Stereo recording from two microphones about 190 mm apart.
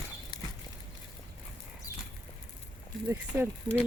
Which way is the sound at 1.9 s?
15° left (ahead or behind).